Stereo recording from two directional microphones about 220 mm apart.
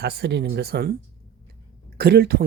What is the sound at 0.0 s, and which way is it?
Speech, 50° right (ahead or behind).